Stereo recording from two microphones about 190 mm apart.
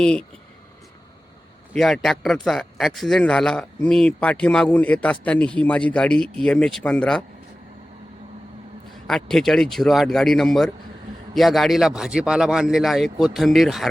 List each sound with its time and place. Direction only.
0.0 s a man's voice: 5° left (ahead or behind)
1.7 s a man's voice: centre (ahead or behind)
9.0 s a man's voice: centre (ahead or behind)